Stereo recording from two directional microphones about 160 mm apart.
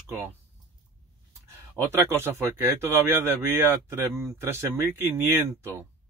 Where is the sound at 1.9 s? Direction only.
15° right (ahead or behind).